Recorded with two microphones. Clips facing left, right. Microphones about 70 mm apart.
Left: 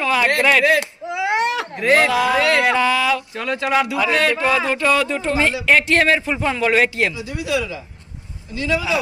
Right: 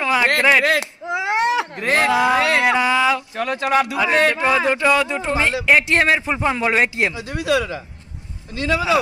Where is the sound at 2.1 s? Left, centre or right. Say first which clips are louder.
Even; right.